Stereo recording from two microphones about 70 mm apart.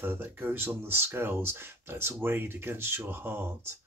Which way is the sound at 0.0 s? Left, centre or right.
Right.